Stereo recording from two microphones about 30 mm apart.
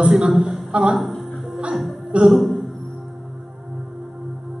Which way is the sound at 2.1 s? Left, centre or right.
Right.